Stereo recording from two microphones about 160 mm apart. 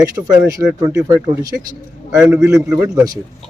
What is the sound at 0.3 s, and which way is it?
Speech, 20° right (ahead or behind).